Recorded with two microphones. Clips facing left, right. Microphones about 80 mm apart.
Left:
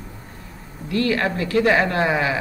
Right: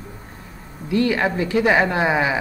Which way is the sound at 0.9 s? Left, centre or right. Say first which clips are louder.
Right 2 dB; centre.